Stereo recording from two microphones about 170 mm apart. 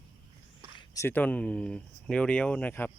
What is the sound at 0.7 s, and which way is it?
Speech, 20° left (ahead or behind).